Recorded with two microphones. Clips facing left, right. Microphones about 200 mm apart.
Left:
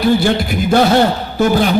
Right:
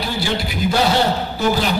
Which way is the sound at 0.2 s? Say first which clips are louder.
Left 6 dB; 55° left (ahead or behind).